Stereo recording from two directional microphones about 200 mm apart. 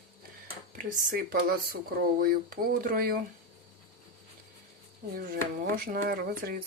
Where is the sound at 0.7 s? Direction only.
40° right (ahead or behind).